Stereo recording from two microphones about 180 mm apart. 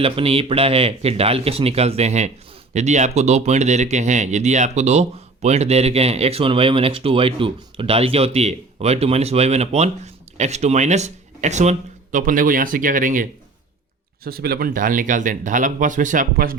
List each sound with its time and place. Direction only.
0.0 s speech: 30° right (ahead or behind); by 13.2 s 45° right (ahead or behind)
14.3 s speech: 60° right (ahead or behind)